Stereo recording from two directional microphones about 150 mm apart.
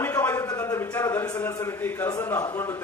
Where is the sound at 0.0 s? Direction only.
15° left (ahead or behind).